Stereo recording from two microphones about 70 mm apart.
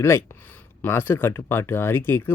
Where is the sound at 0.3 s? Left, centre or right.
Left.